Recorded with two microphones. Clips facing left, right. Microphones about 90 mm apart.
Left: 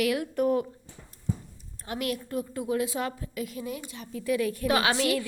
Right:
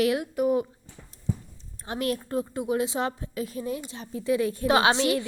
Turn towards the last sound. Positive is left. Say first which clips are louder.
# right 3 dB
turn(degrees=-25)  # may be behind; listen again after turning